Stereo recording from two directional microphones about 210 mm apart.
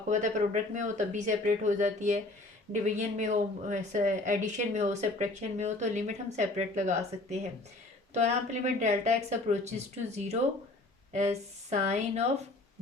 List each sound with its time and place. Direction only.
0.1 s speech: 35° right (ahead or behind)